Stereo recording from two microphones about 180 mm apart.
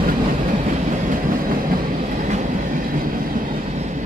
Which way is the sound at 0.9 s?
50° right (ahead or behind).